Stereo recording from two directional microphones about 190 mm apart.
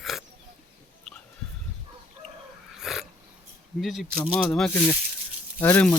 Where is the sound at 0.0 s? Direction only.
Centre (ahead or behind).